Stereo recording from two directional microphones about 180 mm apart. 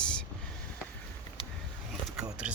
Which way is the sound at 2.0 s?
5° right (ahead or behind).